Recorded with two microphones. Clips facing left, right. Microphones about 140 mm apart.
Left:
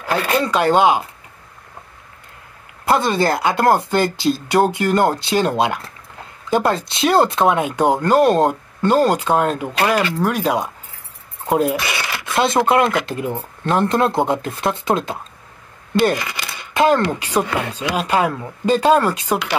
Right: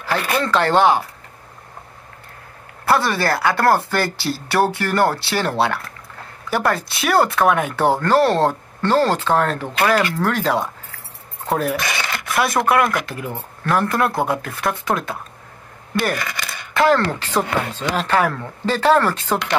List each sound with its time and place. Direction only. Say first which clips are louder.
0.0 s speech: left 2 dB; 15° left (ahead or behind)
2.8 s speech: left 2 dB; 20° left (ahead or behind)
15.9 s coin: left 5 dB; 20° left (ahead or behind)
16.7 s speech: left 1 dB; 20° left (ahead or behind)